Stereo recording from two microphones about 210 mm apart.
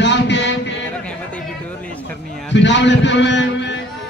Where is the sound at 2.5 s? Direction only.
60° left (ahead or behind).